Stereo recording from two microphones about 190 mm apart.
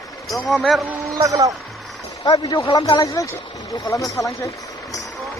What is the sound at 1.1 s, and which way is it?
Speech, 20° right (ahead or behind).